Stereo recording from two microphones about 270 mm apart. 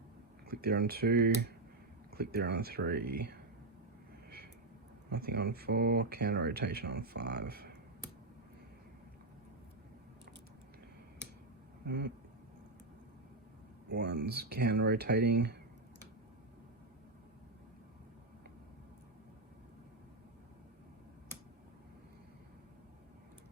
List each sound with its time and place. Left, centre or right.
0.4 s speech: right
5.0 s speech: right
11.9 s speech: right
13.9 s speech: right